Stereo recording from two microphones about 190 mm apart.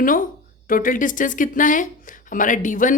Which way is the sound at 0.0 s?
45° left (ahead or behind).